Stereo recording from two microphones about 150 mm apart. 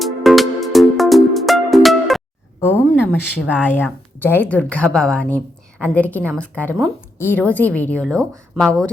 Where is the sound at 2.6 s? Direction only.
15° left (ahead or behind).